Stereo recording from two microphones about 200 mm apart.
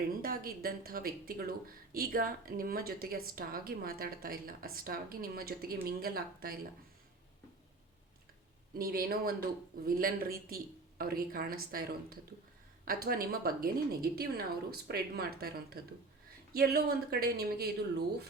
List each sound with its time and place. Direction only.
0.2 s speech: 45° right (ahead or behind)
8.7 s speech: 50° right (ahead or behind)